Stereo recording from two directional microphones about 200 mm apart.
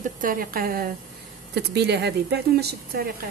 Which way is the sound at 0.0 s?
45° right (ahead or behind).